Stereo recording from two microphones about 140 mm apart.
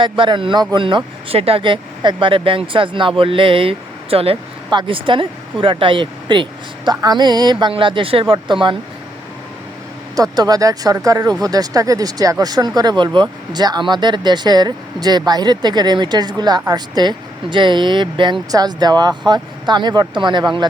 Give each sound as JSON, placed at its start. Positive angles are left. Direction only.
{"t": 0.0, "sound": "speech", "side_deg": -35}
{"t": 10.2, "sound": "speech", "side_deg": -25}